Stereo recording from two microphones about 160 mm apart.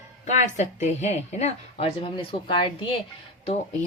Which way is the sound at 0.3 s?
45° left (ahead or behind).